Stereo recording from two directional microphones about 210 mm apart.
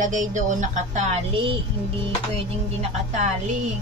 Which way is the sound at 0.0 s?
35° right (ahead or behind).